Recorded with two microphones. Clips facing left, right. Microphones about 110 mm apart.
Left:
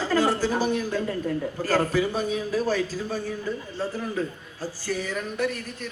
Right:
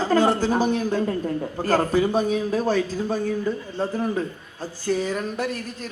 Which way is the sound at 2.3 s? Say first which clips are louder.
Right 3 dB; 25° right (ahead or behind).